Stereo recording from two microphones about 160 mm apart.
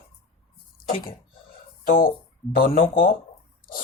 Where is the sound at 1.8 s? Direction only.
60° left (ahead or behind).